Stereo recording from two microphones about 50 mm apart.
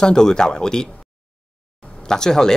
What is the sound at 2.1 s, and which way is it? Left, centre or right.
Speech, centre.